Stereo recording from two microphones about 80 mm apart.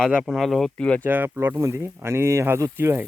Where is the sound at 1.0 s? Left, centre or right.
Right.